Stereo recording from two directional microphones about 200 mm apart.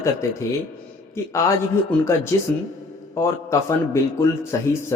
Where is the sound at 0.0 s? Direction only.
15° left (ahead or behind).